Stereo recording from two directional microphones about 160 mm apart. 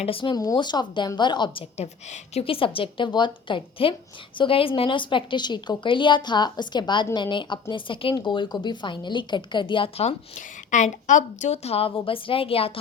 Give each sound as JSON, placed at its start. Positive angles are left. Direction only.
{"t": 0.0, "sound": "a woman's voice", "side_deg": 35}
{"t": 1.7, "sound": "a woman's voice", "side_deg": 40}